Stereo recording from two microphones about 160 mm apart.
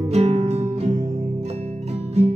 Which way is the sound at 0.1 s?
45° right (ahead or behind).